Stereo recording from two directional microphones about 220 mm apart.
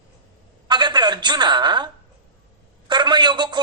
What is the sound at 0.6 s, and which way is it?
A man's voice, 20° right (ahead or behind).